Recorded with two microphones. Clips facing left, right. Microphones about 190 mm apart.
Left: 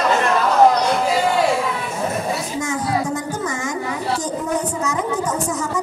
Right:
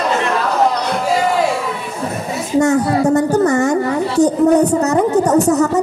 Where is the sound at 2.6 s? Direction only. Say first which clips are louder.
Right 12 dB; 65° right (ahead or behind).